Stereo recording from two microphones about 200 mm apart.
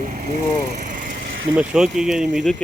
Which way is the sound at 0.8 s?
40° right (ahead or behind).